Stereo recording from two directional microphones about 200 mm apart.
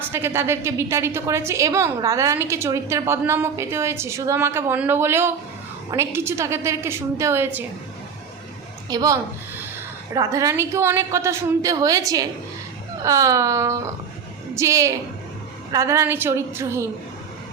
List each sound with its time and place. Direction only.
0.1 s a woman's voice: 10° right (ahead or behind)
8.9 s a woman's voice: 15° right (ahead or behind)